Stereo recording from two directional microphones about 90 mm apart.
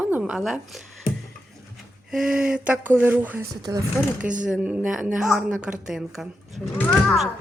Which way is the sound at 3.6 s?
40° right (ahead or behind).